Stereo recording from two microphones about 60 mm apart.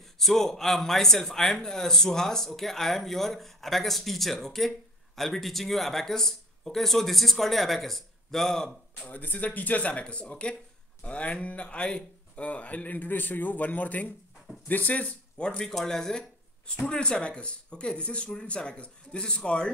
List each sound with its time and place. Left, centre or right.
0.2 s speech: centre
9.0 s speech: left